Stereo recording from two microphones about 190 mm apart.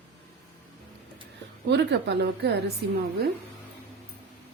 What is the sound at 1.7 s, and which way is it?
Speech, 65° right (ahead or behind).